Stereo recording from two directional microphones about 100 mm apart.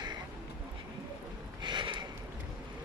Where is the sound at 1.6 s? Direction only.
50° right (ahead or behind).